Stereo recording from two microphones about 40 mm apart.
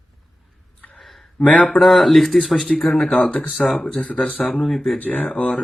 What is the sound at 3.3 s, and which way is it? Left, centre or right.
Speech, left.